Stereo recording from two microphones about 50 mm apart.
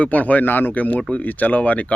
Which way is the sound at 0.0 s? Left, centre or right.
Left.